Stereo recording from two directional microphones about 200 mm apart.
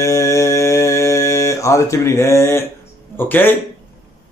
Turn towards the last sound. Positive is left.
turn(degrees=10)  # may be behind; listen again after turning